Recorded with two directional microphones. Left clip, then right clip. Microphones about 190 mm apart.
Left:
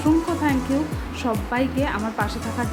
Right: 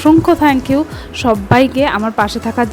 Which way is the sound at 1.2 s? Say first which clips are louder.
Right 13 dB; 50° right (ahead or behind).